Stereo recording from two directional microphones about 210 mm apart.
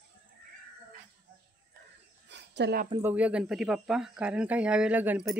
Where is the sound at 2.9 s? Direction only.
10° right (ahead or behind).